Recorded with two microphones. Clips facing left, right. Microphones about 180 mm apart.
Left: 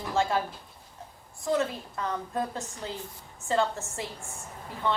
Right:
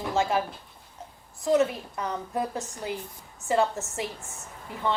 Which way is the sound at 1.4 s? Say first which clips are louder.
Right 5 dB; 20° right (ahead or behind).